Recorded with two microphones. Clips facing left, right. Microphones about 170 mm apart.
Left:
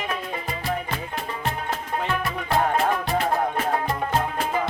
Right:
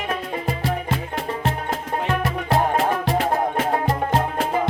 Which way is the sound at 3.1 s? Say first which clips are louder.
Right 2 dB; 85° right.